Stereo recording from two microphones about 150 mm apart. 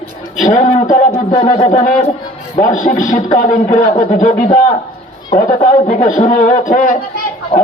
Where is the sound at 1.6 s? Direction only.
50° left (ahead or behind).